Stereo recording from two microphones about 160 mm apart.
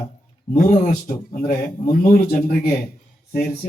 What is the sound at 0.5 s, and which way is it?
Speech, 60° left (ahead or behind).